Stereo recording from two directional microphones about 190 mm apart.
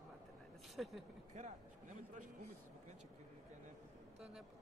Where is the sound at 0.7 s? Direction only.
Centre (ahead or behind).